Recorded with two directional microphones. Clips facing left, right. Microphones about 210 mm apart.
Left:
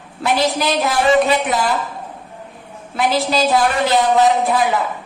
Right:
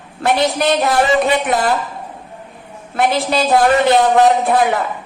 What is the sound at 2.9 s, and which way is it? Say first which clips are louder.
A woman's voice: right 1 dB; 55° right (ahead or behind).